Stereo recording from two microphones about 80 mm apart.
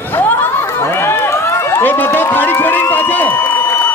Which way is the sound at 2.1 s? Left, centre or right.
Left.